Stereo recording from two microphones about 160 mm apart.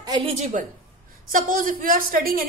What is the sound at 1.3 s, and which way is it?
A woman's voice, 60° right (ahead or behind).